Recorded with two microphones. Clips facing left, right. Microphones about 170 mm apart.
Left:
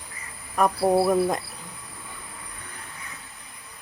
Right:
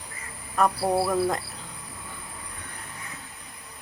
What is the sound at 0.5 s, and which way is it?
Speech, 15° left (ahead or behind).